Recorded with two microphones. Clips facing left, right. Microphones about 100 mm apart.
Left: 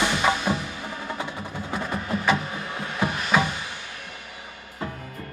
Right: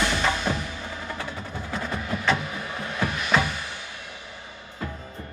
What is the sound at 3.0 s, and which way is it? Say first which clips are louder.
Music: left 2 dB; 20° left (ahead or behind).